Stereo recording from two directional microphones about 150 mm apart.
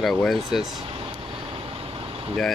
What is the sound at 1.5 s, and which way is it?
Vehicle, 40° right (ahead or behind).